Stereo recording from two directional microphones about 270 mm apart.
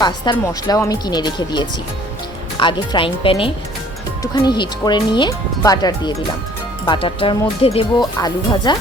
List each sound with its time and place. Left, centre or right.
0.0 s speech: centre